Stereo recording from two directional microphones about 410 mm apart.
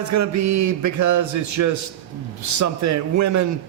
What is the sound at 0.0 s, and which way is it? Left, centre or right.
A man's voice, right.